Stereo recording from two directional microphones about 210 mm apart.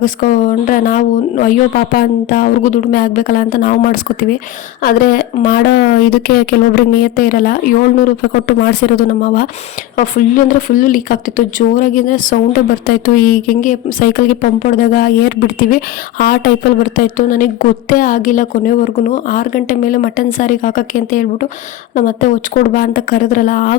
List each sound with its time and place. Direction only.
0.0 s speech: 40° left (ahead or behind)